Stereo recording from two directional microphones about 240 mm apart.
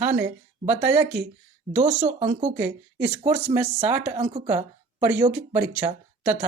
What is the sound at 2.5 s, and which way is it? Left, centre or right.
Speech, centre.